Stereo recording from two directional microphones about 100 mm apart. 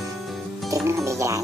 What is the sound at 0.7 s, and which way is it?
Music, 25° right (ahead or behind).